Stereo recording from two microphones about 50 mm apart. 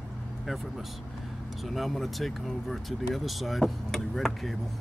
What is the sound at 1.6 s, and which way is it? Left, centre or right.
Speech, centre.